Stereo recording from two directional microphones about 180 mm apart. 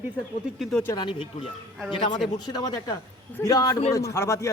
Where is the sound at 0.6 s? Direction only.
Centre (ahead or behind).